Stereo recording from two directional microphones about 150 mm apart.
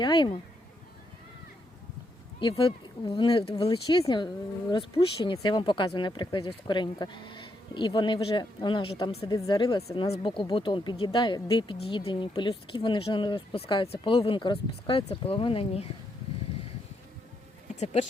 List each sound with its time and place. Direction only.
0.0 s speech: 30° left (ahead or behind)
2.4 s speech: 35° left (ahead or behind)
17.7 s speech: 45° left (ahead or behind)